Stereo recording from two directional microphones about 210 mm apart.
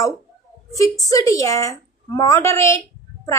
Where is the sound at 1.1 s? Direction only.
15° left (ahead or behind).